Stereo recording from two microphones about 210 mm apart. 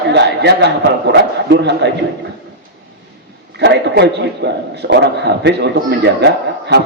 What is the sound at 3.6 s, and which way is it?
A man's voice, 50° right (ahead or behind).